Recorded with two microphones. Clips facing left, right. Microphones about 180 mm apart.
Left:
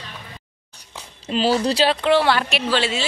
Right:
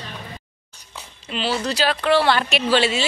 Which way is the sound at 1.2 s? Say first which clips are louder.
Left 5 dB; 40° left (ahead or behind).